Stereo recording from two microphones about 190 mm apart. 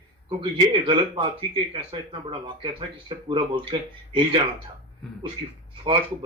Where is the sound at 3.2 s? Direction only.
25° right (ahead or behind).